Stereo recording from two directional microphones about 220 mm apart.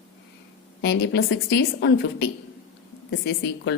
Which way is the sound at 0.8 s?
55° left (ahead or behind).